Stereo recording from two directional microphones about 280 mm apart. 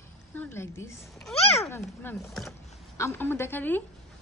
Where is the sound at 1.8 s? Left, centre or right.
Centre.